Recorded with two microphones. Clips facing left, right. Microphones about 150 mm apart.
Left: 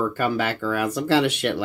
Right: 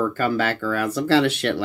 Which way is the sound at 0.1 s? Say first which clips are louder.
Right 1 dB; 15° left (ahead or behind).